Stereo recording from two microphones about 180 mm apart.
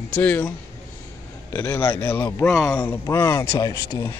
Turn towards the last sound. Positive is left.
turn(degrees=15)  # may be behind; listen again after turning